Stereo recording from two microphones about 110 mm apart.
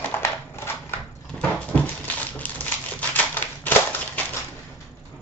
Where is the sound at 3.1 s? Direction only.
15° left (ahead or behind).